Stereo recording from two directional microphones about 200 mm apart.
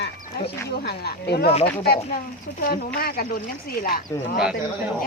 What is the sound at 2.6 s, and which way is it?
Speech, 50° left (ahead or behind).